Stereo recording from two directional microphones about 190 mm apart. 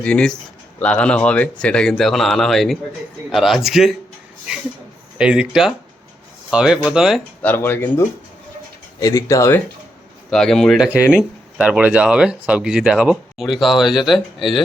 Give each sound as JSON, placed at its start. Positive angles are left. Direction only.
{"t": 0.0, "sound": "speech", "side_deg": 5}
{"t": 5.1, "sound": "speech", "side_deg": -5}
{"t": 7.4, "sound": "speech", "side_deg": 10}
{"t": 10.2, "sound": "speech", "side_deg": 0}